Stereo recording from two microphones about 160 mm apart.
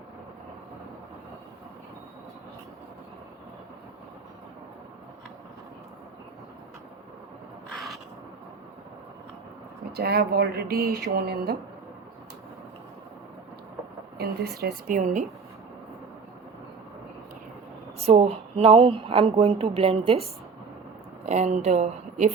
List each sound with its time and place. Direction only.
9.9 s speech: 80° right
14.2 s speech: 75° right (ahead or behind); by 15.2 s 50° right (ahead or behind)
18.0 s speech: 40° right (ahead or behind)
21.2 s speech: 50° right (ahead or behind)